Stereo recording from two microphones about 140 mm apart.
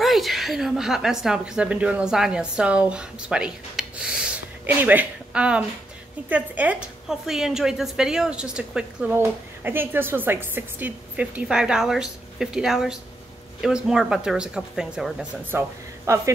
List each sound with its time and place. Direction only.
0.0 s a woman's voice: centre (ahead or behind)
15.5 s a woman's voice: 15° right (ahead or behind)